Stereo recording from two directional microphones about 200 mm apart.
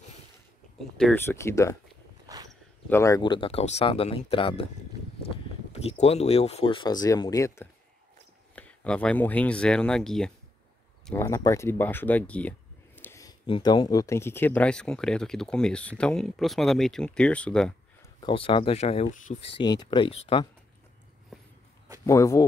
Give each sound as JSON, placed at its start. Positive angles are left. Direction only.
{"t": 0.7, "sound": "speech", "side_deg": 5}
{"t": 2.3, "sound": "a sound", "side_deg": -20}
{"t": 2.9, "sound": "speech", "side_deg": 15}
{"t": 18.2, "sound": "speech", "side_deg": 25}
{"t": 19.5, "sound": "speech", "side_deg": 20}
{"t": 22.0, "sound": "speech", "side_deg": 15}